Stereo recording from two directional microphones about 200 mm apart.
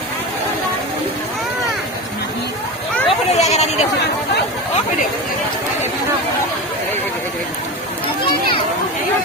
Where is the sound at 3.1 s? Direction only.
35° left (ahead or behind).